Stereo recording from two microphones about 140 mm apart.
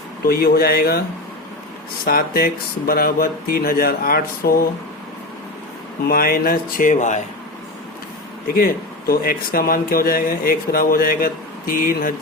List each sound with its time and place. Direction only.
0.3 s speech: 90° left
2.0 s speech: 90° left
6.1 s speech: 90° left; by 7.2 s 60° left (ahead or behind)
8.5 s speech: 90° left